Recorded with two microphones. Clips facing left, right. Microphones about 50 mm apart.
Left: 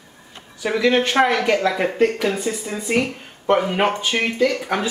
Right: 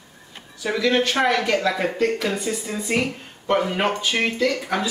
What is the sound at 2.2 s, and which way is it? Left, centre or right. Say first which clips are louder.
Speech: left 3 dB; centre.